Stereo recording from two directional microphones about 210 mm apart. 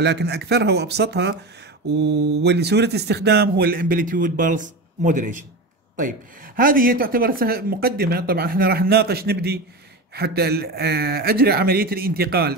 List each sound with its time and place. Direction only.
0.0 s speech: 50° right (ahead or behind)